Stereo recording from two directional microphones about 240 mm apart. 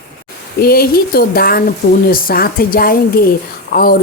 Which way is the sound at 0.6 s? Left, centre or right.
Left.